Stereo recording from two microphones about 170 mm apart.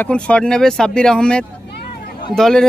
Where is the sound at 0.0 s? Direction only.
5° left (ahead or behind).